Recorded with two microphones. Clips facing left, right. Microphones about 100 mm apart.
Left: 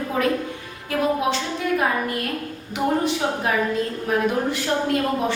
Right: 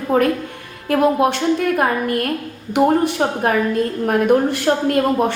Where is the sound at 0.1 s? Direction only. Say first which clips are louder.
Right 6 dB; 55° right (ahead or behind).